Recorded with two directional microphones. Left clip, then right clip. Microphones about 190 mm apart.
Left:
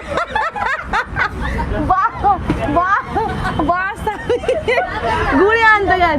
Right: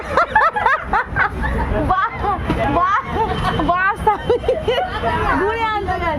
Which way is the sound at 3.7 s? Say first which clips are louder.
Right 5 dB; 5° right (ahead or behind).